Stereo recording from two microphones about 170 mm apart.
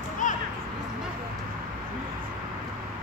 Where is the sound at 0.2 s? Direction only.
50° left (ahead or behind).